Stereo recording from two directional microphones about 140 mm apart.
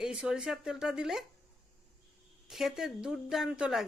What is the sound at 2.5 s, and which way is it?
Speech, centre (ahead or behind).